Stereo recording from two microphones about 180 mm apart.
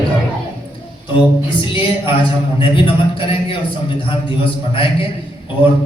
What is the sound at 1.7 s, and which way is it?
A man's voice, 30° left (ahead or behind).